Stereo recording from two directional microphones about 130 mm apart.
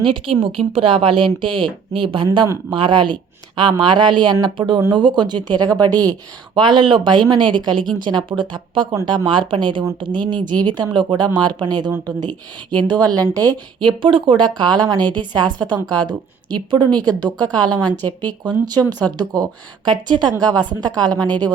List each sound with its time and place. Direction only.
0.0 s a woman's voice: 40° right (ahead or behind)
13.1 s a woman's voice: 10° left (ahead or behind)
13.3 s a woman's voice: 30° right (ahead or behind)
17.8 s a woman's voice: 15° left (ahead or behind)
18.4 s a woman's voice: 30° right (ahead or behind)
21.2 s a woman's voice: 10° left (ahead or behind)